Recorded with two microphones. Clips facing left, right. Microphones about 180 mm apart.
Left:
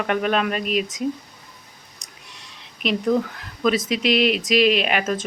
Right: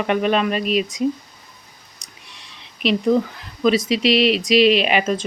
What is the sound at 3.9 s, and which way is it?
Speech, 50° left (ahead or behind).